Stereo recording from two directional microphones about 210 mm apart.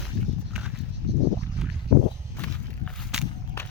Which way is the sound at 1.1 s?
55° right (ahead or behind).